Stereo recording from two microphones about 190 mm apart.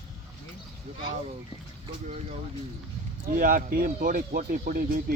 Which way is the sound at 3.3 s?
45° right (ahead or behind).